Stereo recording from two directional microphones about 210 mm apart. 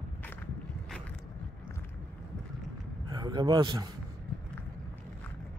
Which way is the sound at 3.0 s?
20° right (ahead or behind).